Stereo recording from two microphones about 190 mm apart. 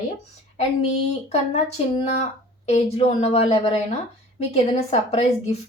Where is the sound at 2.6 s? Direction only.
35° left (ahead or behind).